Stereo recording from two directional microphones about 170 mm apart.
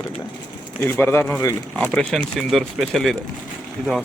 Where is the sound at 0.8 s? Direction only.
10° left (ahead or behind).